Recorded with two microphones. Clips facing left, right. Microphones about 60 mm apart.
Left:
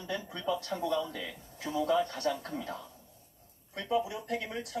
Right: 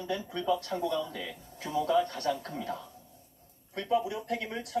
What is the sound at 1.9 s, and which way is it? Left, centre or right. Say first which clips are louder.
Speech: right 2 dB; centre.